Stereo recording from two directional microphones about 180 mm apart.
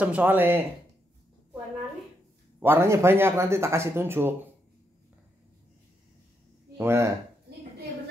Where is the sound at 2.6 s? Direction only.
15° right (ahead or behind).